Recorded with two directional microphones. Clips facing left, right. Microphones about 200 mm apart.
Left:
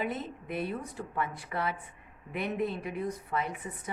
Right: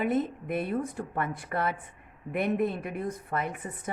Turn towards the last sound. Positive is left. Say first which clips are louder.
# right 3 dB
turn(degrees=-50)  # may be behind; listen again after turning